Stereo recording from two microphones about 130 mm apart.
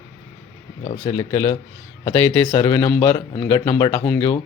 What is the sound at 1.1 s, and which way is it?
A man's voice, 25° left (ahead or behind).